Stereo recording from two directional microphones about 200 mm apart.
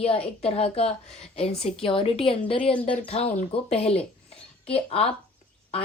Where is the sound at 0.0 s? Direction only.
30° left (ahead or behind).